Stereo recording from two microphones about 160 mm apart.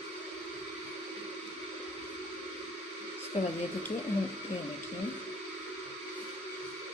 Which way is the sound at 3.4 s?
40° left (ahead or behind).